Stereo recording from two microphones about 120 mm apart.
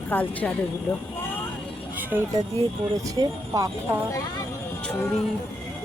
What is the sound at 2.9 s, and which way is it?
Speech, 30° right (ahead or behind).